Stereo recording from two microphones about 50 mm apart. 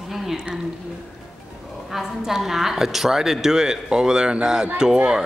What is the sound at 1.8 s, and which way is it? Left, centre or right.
A woman's voice, centre.